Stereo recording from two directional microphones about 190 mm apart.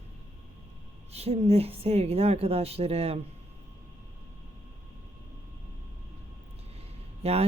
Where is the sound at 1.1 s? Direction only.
35° right (ahead or behind).